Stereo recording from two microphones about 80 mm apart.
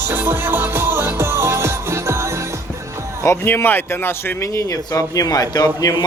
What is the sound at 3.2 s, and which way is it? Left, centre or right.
A man's voice, left.